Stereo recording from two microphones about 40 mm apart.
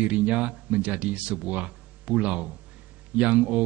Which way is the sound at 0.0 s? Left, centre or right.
Right.